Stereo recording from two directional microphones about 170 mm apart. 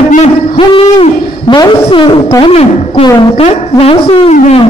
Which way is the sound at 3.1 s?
30° left (ahead or behind).